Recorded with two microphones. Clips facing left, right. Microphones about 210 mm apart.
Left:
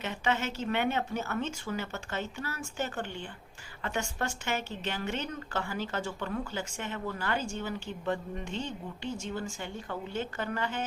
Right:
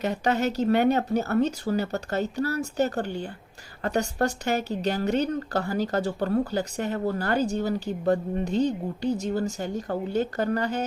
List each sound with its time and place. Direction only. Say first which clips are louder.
0.0 s speech: right 7 dB; 40° right (ahead or behind)